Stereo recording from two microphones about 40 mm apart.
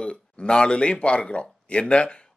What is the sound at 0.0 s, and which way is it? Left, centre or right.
A man's voice, left.